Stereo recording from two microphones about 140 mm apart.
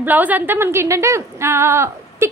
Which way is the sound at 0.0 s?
10° right (ahead or behind).